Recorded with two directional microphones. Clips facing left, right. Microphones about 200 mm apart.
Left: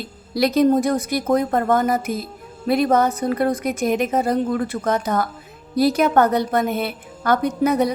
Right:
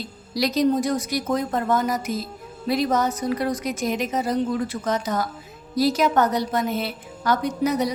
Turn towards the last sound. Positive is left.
turn(degrees=55)  # may be behind; listen again after turning